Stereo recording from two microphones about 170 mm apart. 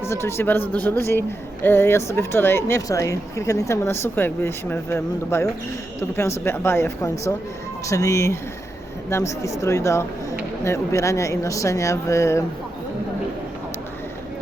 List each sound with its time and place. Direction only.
0.0 s speech: 15° left (ahead or behind)